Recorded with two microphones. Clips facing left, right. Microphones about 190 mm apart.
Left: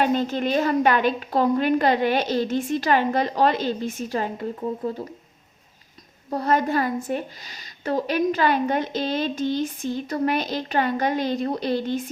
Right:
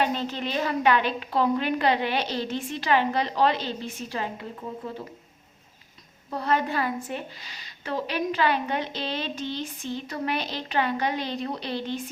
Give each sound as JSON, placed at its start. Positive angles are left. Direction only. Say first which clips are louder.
{"t": 0.0, "sound": "a woman's voice", "louder": "left 5 dB", "side_deg": 45}
{"t": 6.3, "sound": "a woman's voice", "louder": "left 4 dB", "side_deg": 45}